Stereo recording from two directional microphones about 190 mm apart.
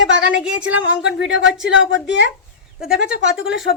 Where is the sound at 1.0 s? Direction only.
90° right.